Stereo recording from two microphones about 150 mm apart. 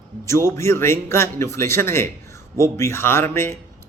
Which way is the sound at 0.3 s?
20° left (ahead or behind).